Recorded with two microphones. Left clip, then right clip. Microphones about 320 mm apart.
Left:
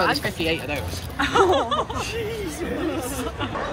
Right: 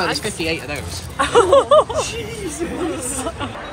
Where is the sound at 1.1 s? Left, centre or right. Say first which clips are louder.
Right 6 dB; centre.